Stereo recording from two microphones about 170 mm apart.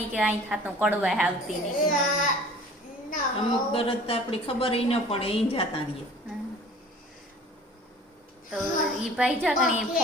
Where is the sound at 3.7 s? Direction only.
35° left (ahead or behind).